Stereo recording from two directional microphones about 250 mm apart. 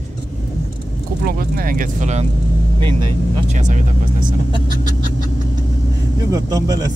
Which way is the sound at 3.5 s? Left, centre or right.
Right.